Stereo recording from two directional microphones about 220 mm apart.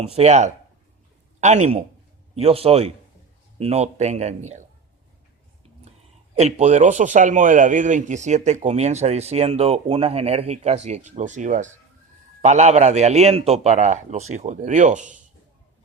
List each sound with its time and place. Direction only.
0.0 s a man's voice: 30° right (ahead or behind)
6.3 s a man's voice: 30° right (ahead or behind)